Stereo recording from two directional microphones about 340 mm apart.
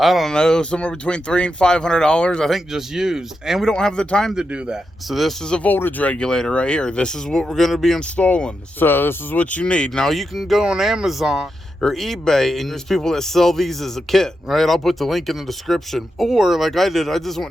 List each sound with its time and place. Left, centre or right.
0.0 s speech: centre